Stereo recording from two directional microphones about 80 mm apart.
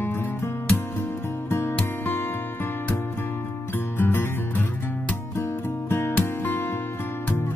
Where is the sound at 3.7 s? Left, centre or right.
Left.